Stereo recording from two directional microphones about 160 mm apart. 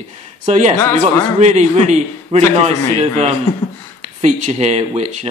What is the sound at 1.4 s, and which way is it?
A man's voice, 45° right (ahead or behind).